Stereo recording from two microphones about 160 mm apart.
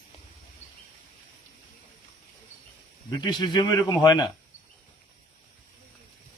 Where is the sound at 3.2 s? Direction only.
25° left (ahead or behind).